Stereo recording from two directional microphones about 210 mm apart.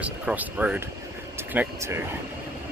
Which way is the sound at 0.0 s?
5° right (ahead or behind).